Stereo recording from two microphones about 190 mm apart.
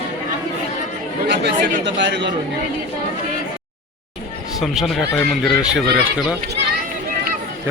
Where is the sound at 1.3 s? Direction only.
65° right (ahead or behind).